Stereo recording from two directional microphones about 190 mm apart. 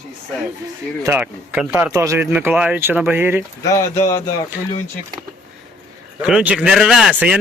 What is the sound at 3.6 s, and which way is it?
Speech, 15° left (ahead or behind).